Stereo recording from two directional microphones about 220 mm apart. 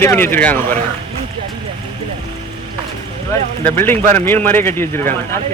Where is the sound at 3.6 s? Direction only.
10° left (ahead or behind).